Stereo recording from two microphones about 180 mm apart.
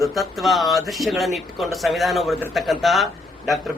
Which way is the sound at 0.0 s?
Centre (ahead or behind).